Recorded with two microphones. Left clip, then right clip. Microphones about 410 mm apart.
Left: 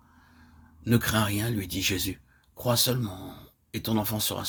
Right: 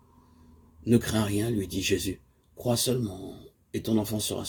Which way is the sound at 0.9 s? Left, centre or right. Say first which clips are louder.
Even; left.